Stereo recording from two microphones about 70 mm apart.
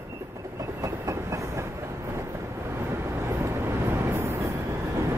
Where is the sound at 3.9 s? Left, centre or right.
Right.